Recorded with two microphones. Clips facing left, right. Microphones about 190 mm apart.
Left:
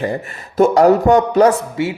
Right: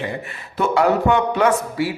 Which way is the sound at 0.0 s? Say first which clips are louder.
Left 6 dB; 40° left (ahead or behind).